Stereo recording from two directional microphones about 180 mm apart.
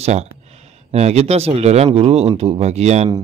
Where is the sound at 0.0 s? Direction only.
35° right (ahead or behind).